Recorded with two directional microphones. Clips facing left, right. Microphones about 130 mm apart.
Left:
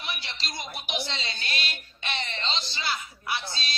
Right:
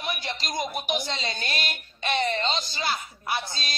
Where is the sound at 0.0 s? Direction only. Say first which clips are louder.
Right 5 dB; 45° right (ahead or behind).